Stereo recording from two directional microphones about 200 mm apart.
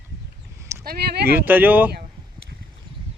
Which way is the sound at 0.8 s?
50° right (ahead or behind).